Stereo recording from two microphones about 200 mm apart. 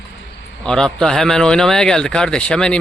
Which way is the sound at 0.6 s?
5° left (ahead or behind).